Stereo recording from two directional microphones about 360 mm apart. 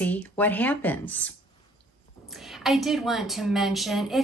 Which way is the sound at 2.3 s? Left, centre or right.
Centre.